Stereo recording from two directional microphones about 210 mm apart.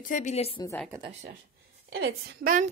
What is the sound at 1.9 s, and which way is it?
Speech, 50° right (ahead or behind).